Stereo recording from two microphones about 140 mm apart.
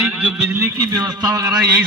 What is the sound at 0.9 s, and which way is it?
Speech, 30° right (ahead or behind).